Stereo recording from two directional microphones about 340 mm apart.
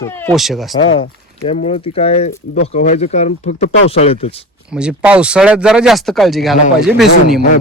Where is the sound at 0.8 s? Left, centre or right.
Centre.